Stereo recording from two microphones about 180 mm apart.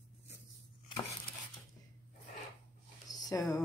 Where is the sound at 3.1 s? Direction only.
20° left (ahead or behind).